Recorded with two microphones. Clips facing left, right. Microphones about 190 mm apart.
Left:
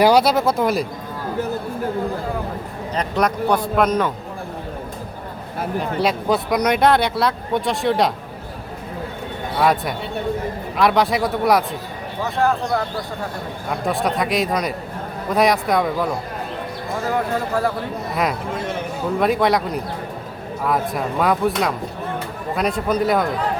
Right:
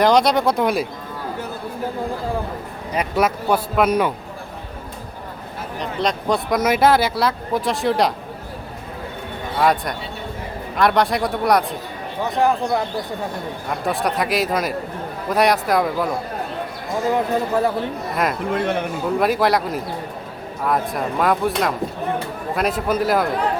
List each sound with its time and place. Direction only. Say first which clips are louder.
0.0 s speech: left 1 dB; 5° left (ahead or behind)
2.9 s a man's voice: right 1 dB; 5° right (ahead or behind)
5.8 s speech: even; 5° left (ahead or behind)
9.6 s speech: even; centre (ahead or behind)
13.8 s speech: left 1 dB; centre (ahead or behind)
17.3 s a man's voice: right 2 dB; 20° right (ahead or behind)
18.1 s speech: left 1 dB; centre (ahead or behind)
18.5 s a man's voice: right 5 dB; 65° right (ahead or behind)
19.2 s speech: left 1 dB; centre (ahead or behind)